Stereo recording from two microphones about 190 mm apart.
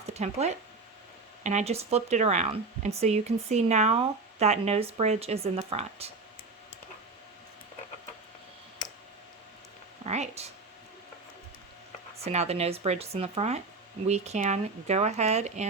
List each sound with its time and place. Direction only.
0.1 s speech: 35° right (ahead or behind)
10.1 s speech: 35° right (ahead or behind)
12.2 s speech: 35° right (ahead or behind)